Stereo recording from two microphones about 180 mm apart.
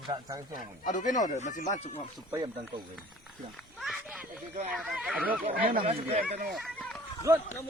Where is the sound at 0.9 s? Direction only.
45° left (ahead or behind).